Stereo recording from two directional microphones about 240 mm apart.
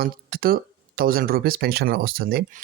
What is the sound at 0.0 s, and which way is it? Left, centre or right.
Speech, right.